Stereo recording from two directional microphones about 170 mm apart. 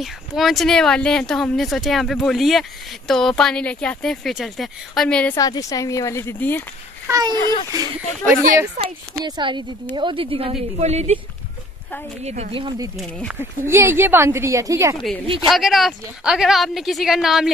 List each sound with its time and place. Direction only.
0.0 s speech: centre (ahead or behind)
5.3 s speech: 20° left (ahead or behind)
7.1 s a child's voice: 20° right (ahead or behind); by 11.1 s 40° right (ahead or behind)
12.3 s a woman's voice: 35° right (ahead or behind)
12.9 s speech: centre (ahead or behind)
13.4 s speech: 15° right (ahead or behind)
15.4 s speech: centre (ahead or behind)